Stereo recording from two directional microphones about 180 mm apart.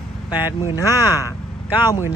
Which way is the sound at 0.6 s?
20° left (ahead or behind).